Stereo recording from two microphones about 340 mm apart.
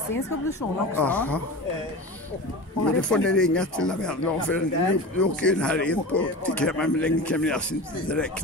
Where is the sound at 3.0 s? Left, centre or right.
Centre.